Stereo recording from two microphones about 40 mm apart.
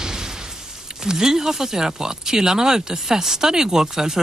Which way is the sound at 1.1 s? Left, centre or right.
Centre.